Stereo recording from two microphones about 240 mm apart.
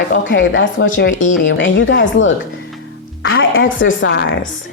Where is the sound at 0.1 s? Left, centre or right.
Left.